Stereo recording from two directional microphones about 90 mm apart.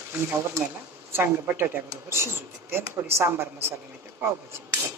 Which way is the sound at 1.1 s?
25° right (ahead or behind).